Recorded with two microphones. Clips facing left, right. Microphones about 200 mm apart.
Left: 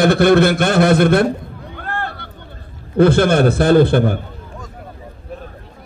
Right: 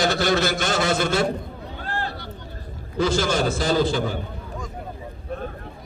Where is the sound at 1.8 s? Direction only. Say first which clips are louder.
Left 4 dB; 55° left (ahead or behind).